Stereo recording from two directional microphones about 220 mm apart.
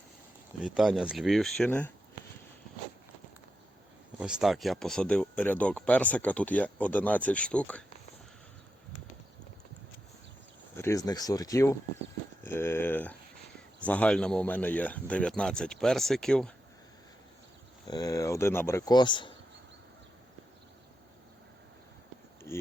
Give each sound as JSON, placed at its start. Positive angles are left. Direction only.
{"t": 0.6, "sound": "speech", "side_deg": -5}
{"t": 4.2, "sound": "speech", "side_deg": -5}
{"t": 10.8, "sound": "speech", "side_deg": 15}
{"t": 17.8, "sound": "speech", "side_deg": 15}
{"t": 22.5, "sound": "a sound", "side_deg": 10}